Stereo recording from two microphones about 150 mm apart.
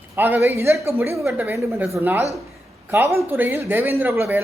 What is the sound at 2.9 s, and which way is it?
A woman's voice, 20° right (ahead or behind).